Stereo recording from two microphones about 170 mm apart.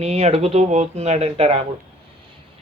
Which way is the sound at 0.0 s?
40° right (ahead or behind).